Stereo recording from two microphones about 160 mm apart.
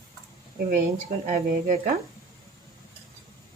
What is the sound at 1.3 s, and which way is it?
Speech, 50° right (ahead or behind).